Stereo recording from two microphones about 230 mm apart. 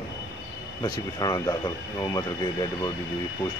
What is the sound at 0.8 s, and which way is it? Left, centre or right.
Speech, centre.